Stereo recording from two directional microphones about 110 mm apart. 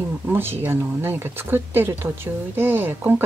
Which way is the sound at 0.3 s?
20° right (ahead or behind).